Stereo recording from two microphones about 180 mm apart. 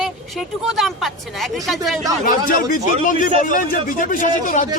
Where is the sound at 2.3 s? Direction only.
50° left (ahead or behind).